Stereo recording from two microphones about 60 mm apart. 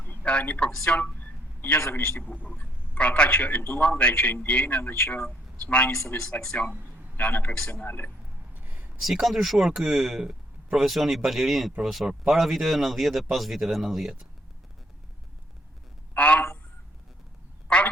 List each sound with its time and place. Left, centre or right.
0.0 s a sound: left
1.9 s speech: left
3.0 s a man's voice: centre
4.8 s speech: left
5.6 s a man's voice: centre
7.2 s a man's voice: left
7.9 s speech: left
8.5 s a sound: right
9.0 s speech: centre
16.1 s a man's voice: left
17.7 s quack: centre